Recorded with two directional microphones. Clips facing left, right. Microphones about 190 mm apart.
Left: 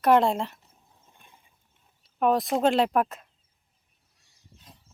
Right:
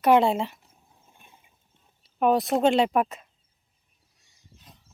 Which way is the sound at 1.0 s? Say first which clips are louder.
Right 1 dB; 15° right (ahead or behind).